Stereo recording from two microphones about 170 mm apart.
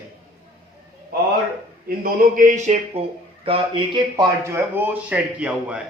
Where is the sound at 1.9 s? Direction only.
55° right (ahead or behind); by 4.2 s 30° right (ahead or behind).